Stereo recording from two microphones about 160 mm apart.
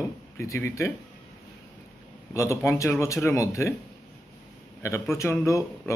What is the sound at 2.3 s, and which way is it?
Speech, 20° left (ahead or behind).